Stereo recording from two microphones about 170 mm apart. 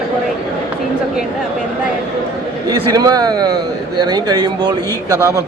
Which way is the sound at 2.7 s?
20° right (ahead or behind).